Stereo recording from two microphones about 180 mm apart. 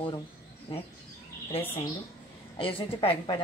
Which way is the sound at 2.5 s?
30° left (ahead or behind).